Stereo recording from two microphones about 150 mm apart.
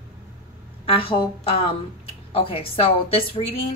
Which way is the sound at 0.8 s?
35° left (ahead or behind).